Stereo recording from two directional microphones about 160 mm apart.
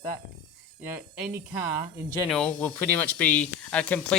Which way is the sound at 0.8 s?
10° right (ahead or behind).